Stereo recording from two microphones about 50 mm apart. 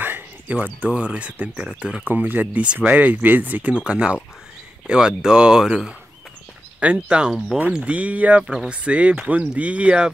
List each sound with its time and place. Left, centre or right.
0.0 s cricket: right
0.6 s speech: right
2.0 s speech: right
2.6 s speech: right
3.7 s speech: right
6.8 s speech: right